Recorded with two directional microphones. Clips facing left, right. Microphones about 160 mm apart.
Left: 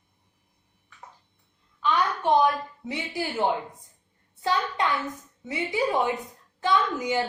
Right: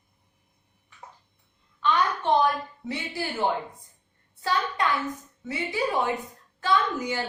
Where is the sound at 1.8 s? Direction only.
10° left (ahead or behind).